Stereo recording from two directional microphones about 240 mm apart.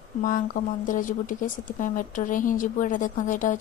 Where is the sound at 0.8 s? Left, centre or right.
Left.